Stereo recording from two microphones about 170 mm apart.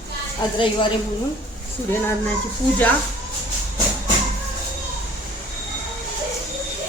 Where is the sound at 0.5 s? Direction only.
30° left (ahead or behind).